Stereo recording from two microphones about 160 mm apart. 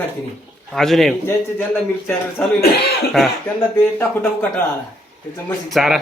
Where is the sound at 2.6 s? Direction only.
90° left.